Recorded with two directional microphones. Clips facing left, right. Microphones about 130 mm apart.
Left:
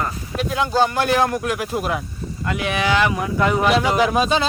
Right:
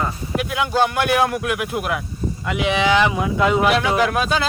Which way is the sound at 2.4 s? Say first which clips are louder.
Right 2 dB; 15° right (ahead or behind).